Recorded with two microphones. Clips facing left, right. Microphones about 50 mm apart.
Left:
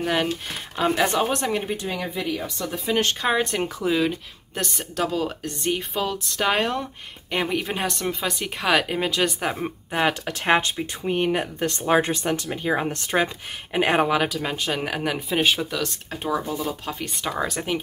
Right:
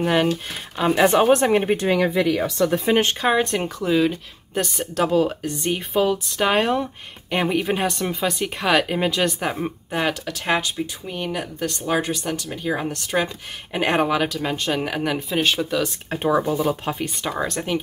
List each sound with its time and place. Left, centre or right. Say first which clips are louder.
0.0 s speech: right 4 dB; centre
1.1 s speech: right 7 dB; right
1.8 s speech: right 9 dB; right
2.6 s speech: right 10 dB; right
2.9 s speech: even; right
3.2 s speech: right 3 dB; centre
5.0 s speech: right 6 dB; centre
5.4 s speech: right 1 dB; centre
9.8 s speech: left 1 dB; centre
10.2 s speech: left 2 dB; left
12.3 s speech: left 1 dB; centre
13.7 s speech: even; centre
16.1 s speech: right 7 dB; right
17.0 s speech: right 2 dB; centre